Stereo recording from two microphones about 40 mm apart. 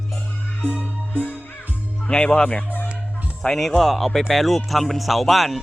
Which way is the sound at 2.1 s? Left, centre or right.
Left.